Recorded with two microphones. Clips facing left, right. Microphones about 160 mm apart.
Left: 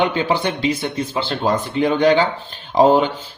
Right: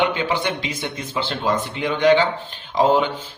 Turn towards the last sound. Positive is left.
turn(degrees=35)  # may be behind; listen again after turning